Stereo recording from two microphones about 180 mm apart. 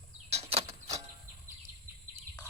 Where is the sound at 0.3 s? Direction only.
35° right (ahead or behind).